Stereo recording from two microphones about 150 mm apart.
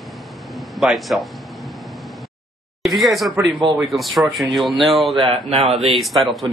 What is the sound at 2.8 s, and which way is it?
A man's voice, centre (ahead or behind).